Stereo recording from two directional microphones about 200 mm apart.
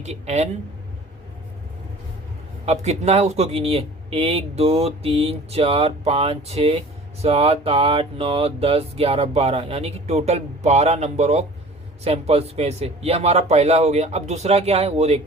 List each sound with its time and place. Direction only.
0.0 s speech: 35° right (ahead or behind)
2.6 s speech: 35° right (ahead or behind)